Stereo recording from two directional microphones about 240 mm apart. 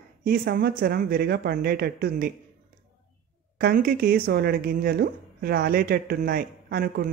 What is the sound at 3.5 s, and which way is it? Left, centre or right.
Speech, right.